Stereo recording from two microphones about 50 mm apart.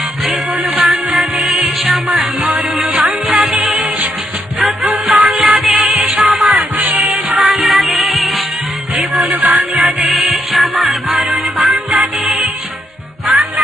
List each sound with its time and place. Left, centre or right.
0.3 s music: centre
4.6 s music: centre
6.7 s music: right
7.3 s music: centre
9.4 s music: centre